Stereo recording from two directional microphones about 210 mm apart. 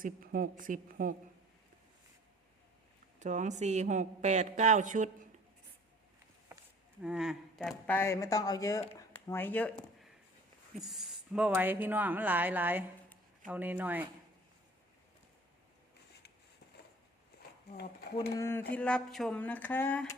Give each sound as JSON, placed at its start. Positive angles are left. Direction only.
{"t": 0.0, "sound": "speech", "side_deg": -40}
{"t": 3.2, "sound": "speech", "side_deg": -35}
{"t": 7.0, "sound": "speech", "side_deg": -5}
{"t": 10.8, "sound": "speech", "side_deg": 0}
{"t": 17.7, "sound": "speech", "side_deg": 50}
{"t": 18.3, "sound": "speech", "side_deg": 10}